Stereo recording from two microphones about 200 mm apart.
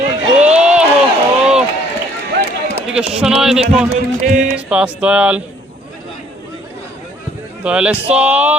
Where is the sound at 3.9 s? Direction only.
35° right (ahead or behind).